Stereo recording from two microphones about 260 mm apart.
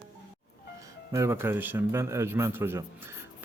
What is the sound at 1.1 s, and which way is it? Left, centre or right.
Speech, centre.